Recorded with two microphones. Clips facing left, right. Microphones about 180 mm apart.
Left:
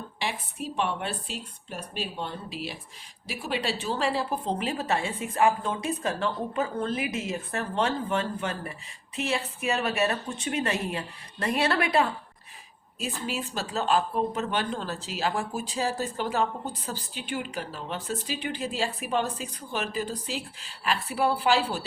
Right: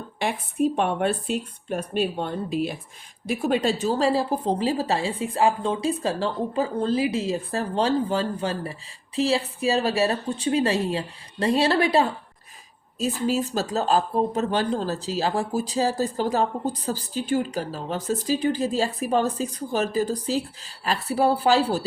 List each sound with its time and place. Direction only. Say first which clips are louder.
0.2 s a woman's voice: right 11 dB; 50° right (ahead or behind)